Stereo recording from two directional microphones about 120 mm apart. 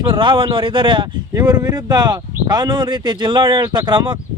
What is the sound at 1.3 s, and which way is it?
Speech, 30° right (ahead or behind).